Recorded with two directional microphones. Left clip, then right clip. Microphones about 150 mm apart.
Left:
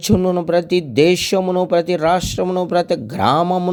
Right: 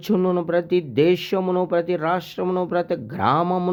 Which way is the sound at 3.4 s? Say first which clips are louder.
Left 5 dB; 20° left (ahead or behind).